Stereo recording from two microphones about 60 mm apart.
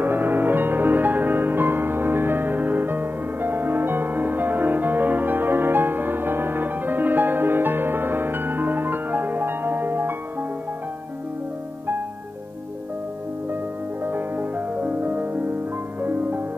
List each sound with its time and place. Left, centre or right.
0.0 s music: right
14.0 s music: right